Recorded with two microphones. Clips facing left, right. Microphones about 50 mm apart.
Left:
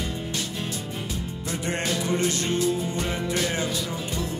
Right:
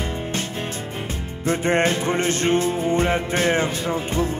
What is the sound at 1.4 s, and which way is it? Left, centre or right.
Music, right.